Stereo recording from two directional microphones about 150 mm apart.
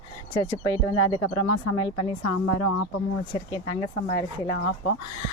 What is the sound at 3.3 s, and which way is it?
Speech, 30° left (ahead or behind).